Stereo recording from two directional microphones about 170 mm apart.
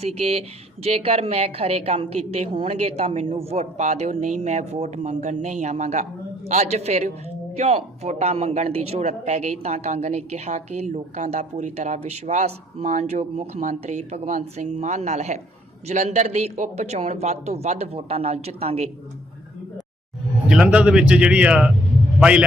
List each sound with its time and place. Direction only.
0.0 s speech: 35° right (ahead or behind)
20.5 s a man's voice: 5° right (ahead or behind)